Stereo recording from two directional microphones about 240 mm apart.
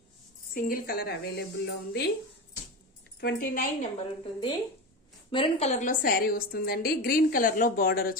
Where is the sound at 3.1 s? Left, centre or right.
Left.